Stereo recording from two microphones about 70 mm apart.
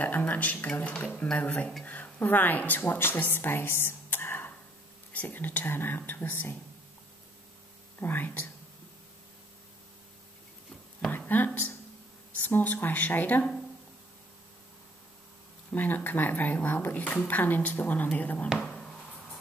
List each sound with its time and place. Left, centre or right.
0.0 s speech: left
8.0 s speech: left
11.1 s a sound: left
12.4 s speech: left
15.7 s speech: left
18.6 s a sound: centre